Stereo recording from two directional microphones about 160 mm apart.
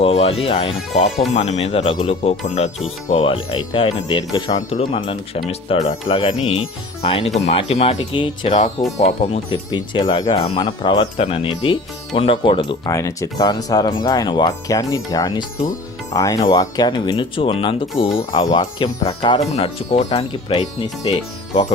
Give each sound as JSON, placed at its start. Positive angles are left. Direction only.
{"t": 0.0, "sound": "speech", "side_deg": 40}
{"t": 9.0, "sound": "speech", "side_deg": 45}
{"t": 9.6, "sound": "speech", "side_deg": 30}
{"t": 12.9, "sound": "speech", "side_deg": 20}